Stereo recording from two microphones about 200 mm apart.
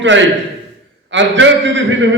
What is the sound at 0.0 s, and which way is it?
A man's voice, 65° right (ahead or behind).